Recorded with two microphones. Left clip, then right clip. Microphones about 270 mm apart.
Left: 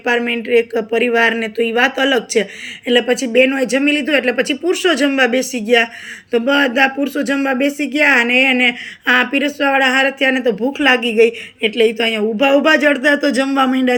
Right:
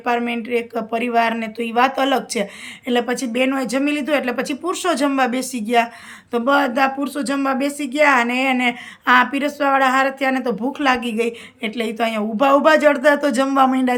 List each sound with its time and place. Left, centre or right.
0.1 s speech: centre
0.7 s speech: right
0.9 s speech: centre